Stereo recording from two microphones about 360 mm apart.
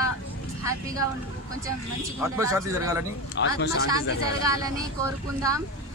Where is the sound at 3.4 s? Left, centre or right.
Left.